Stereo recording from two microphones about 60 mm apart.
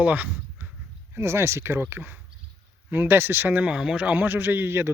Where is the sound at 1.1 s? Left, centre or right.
Right.